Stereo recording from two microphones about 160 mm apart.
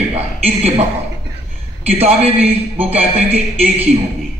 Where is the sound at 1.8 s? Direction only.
40° right (ahead or behind).